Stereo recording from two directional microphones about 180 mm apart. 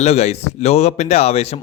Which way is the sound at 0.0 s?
35° left (ahead or behind).